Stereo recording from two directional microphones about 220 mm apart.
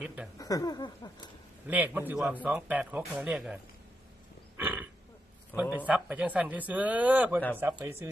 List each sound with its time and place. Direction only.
0.3 s a sound: 15° left (ahead or behind)
1.6 s a man's voice: 5° right (ahead or behind)
4.5 s wild animals: 10° right (ahead or behind)
5.7 s a man's voice: 5° right (ahead or behind)